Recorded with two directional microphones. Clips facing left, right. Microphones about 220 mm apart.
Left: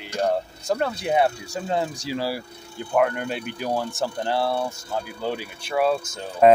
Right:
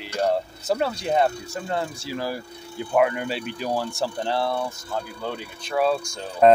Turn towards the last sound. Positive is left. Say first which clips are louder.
# even
turn(degrees=5)  # may be behind; listen again after turning